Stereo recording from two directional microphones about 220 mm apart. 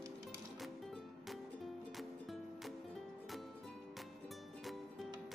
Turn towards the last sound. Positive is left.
turn(degrees=0)  # may be behind; listen again after turning